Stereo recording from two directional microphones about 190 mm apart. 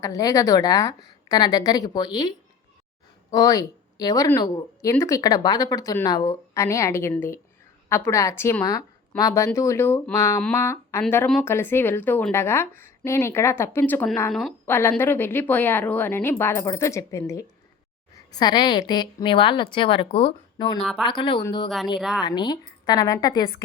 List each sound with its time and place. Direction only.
0.0 s speech: 20° left (ahead or behind)
3.3 s a woman's voice: 20° left (ahead or behind)